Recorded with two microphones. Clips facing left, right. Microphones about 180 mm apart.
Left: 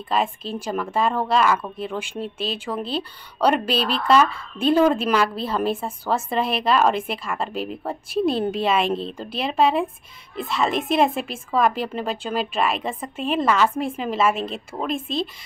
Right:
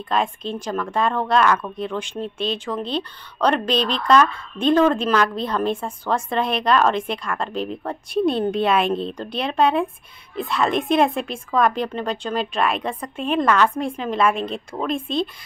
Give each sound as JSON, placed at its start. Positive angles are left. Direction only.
{"t": 0.1, "sound": "a woman's voice", "side_deg": 5}